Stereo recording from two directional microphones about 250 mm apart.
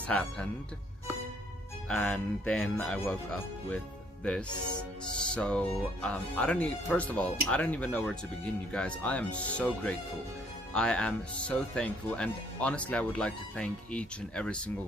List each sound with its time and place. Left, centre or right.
0.1 s speech: centre
1.9 s speech: centre